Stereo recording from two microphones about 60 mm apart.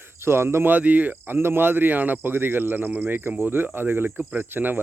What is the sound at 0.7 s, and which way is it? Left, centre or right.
Speech, right.